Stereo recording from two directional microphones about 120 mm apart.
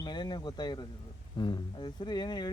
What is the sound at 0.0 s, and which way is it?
Speech, 35° left (ahead or behind).